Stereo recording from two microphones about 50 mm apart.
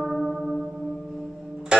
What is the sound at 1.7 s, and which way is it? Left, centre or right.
Music, centre.